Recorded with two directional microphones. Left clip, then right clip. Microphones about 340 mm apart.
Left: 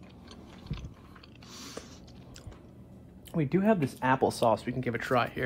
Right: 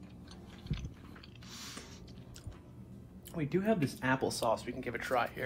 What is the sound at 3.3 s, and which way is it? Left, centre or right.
Speech, left.